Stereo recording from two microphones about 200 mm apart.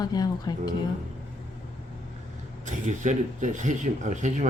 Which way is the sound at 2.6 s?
35° right (ahead or behind).